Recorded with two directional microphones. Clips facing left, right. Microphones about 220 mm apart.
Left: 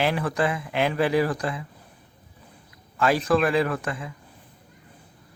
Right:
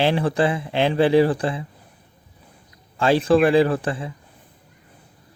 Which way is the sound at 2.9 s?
30° right (ahead or behind).